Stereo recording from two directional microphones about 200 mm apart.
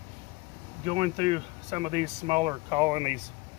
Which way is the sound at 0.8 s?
30° right (ahead or behind).